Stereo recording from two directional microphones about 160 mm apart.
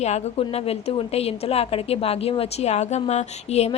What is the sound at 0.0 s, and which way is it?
A woman's voice, 40° left (ahead or behind).